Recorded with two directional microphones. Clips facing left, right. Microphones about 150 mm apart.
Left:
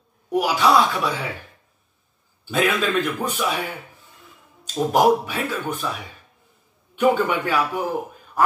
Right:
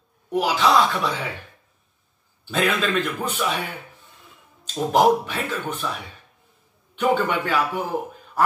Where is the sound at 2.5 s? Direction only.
10° left (ahead or behind).